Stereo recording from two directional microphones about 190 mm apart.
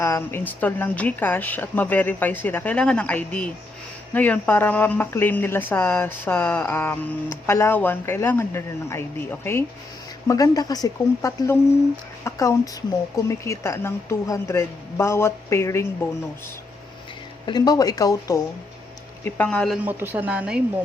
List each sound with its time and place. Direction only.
0.0 s speech: 15° left (ahead or behind)
17.4 s speech: 20° left (ahead or behind)
19.2 s speech: 5° left (ahead or behind)
19.8 s speech: 10° right (ahead or behind)